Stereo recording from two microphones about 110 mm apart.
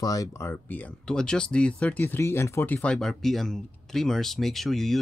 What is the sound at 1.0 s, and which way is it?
Speech, 5° left (ahead or behind).